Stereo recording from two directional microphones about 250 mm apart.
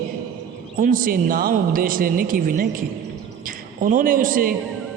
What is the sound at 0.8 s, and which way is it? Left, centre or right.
A man's voice, right.